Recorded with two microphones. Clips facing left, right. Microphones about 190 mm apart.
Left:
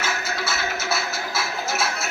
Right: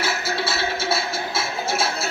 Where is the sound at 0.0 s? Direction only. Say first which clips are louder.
Right 3 dB; 30° right (ahead or behind).